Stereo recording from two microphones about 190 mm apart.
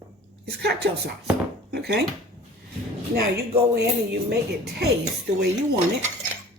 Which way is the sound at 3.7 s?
60° right (ahead or behind).